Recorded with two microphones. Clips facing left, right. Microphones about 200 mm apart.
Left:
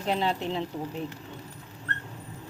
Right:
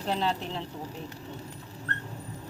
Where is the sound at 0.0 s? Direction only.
15° left (ahead or behind).